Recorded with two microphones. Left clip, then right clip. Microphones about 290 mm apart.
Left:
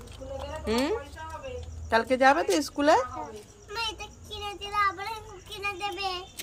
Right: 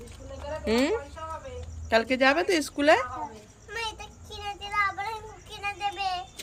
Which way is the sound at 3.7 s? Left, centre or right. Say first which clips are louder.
Left 1 dB; centre.